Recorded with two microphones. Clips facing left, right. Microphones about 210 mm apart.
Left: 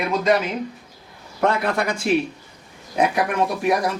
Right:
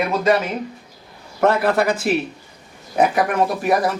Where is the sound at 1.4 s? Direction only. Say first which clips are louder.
Right 4 dB; 5° right (ahead or behind).